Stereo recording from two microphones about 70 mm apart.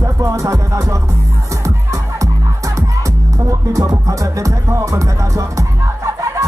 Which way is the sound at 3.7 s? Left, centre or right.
Right.